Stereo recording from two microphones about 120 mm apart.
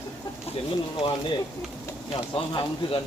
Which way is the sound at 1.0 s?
50° left (ahead or behind).